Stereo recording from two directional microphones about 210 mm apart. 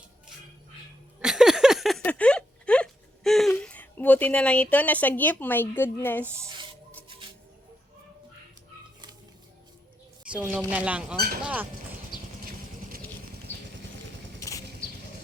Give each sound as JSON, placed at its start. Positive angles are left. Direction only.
{"t": 1.2, "sound": "a sound", "side_deg": 0}
{"t": 10.3, "sound": "speech", "side_deg": -5}
{"t": 14.3, "sound": "vehicle", "side_deg": 15}